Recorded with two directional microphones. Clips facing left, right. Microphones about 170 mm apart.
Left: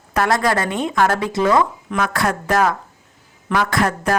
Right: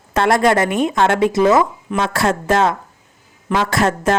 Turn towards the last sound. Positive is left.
turn(degrees=-25)  # may be behind; listen again after turning